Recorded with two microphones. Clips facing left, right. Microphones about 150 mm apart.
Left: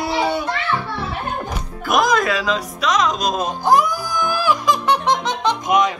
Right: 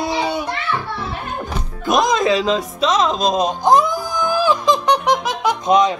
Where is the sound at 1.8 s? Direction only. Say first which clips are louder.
Right 1 dB; 25° right (ahead or behind).